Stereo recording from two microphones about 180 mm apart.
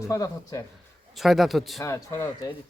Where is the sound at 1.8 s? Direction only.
15° left (ahead or behind).